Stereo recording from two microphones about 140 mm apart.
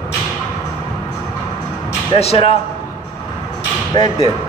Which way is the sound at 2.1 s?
45° left (ahead or behind).